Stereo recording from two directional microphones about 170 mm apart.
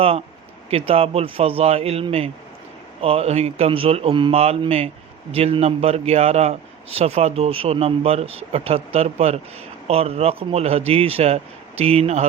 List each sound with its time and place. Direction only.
0.7 s a man's voice: 35° right (ahead or behind)